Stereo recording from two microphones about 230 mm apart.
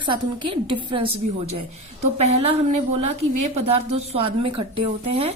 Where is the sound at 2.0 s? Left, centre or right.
Right.